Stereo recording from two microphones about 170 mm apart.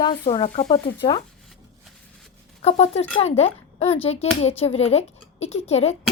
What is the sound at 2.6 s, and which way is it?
A woman's voice, 40° left (ahead or behind).